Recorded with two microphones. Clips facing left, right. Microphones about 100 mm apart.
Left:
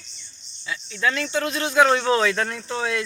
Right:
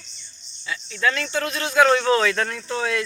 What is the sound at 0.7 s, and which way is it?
Speech, 20° left (ahead or behind).